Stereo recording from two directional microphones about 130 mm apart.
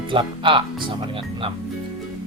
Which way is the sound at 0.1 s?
40° right (ahead or behind).